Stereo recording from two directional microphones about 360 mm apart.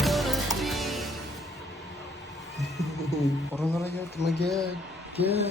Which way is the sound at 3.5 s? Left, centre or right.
Centre.